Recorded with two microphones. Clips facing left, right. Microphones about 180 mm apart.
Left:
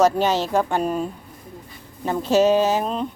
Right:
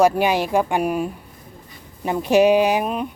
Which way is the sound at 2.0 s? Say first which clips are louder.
Right 2 dB; 15° right (ahead or behind).